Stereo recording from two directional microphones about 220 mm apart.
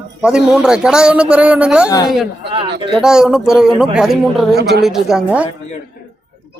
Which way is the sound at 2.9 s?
5° right (ahead or behind).